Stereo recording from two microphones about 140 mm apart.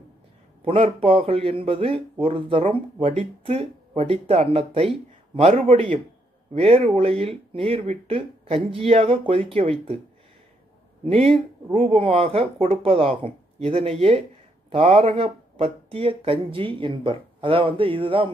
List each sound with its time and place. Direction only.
0.7 s speech: 40° right (ahead or behind)
11.1 s speech: 45° right (ahead or behind)